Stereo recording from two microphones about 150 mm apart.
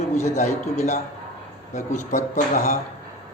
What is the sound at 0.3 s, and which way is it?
A man's voice, 50° left (ahead or behind).